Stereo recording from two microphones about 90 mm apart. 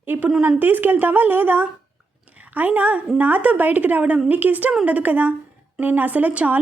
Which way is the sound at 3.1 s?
20° right (ahead or behind).